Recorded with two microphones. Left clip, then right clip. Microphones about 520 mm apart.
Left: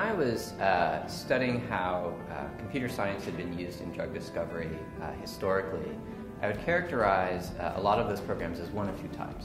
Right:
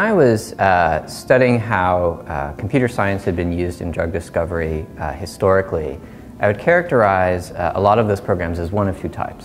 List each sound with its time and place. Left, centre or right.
0.0 s speech: right